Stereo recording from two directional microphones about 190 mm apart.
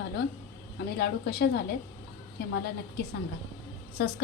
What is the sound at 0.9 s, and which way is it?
A woman's voice, 60° left (ahead or behind).